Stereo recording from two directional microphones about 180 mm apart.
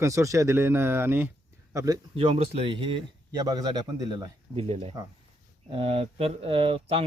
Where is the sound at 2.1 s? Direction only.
35° right (ahead or behind).